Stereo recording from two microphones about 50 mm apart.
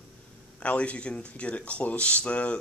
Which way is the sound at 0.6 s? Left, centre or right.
Left.